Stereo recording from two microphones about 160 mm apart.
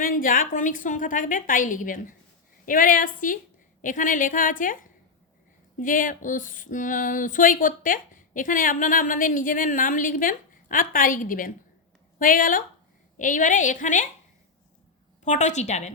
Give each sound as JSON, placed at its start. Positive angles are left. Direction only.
{"t": 0.0, "sound": "a sound", "side_deg": 60}
{"t": 13.1, "sound": "a woman's voice", "side_deg": 55}
{"t": 15.2, "sound": "a woman's voice", "side_deg": 50}